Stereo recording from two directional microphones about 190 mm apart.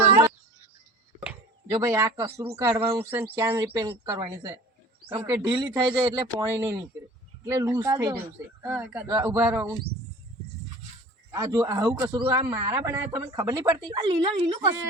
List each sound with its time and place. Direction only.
1.7 s speech: 15° right (ahead or behind)
2.2 s a man's voice: 30° right (ahead or behind)
2.6 s a man's voice: 15° right (ahead or behind)
5.0 s speech: 10° right (ahead or behind)
8.6 s speech: 10° right (ahead or behind)
11.3 s a man's voice: 20° right (ahead or behind)